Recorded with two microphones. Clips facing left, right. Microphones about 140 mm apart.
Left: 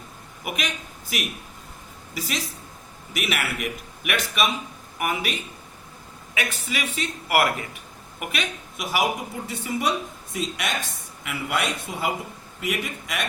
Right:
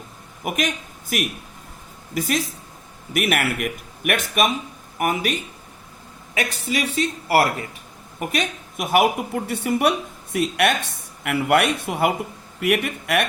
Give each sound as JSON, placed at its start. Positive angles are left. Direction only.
{"t": 0.4, "sound": "speech", "side_deg": -45}
{"t": 6.3, "sound": "a man's voice", "side_deg": -35}